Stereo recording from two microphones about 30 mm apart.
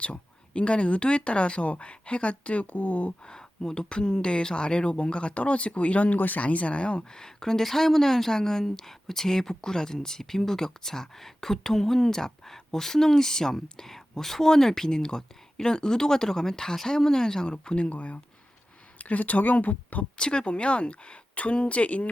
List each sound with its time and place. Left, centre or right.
0.0 s speech: left
3.2 s speech: left
5.3 s speech: left
6.1 s speech: left
6.4 s speech: left
7.1 s speech: left
7.6 s speech: centre; by 17.7 s left
17.7 s speech: left
18.9 s speech: left
20.1 s speech: left